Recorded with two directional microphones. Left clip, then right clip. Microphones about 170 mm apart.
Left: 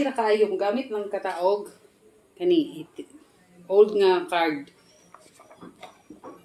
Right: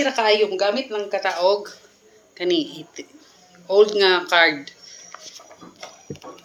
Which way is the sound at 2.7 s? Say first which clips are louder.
Right 2 dB; 35° right (ahead or behind).